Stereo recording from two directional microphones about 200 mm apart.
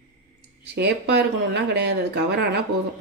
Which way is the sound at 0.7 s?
55° right (ahead or behind).